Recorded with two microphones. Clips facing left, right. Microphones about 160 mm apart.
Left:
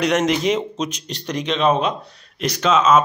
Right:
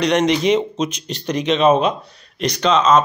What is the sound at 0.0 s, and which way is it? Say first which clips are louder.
Speech: right 2 dB; 5° left (ahead or behind).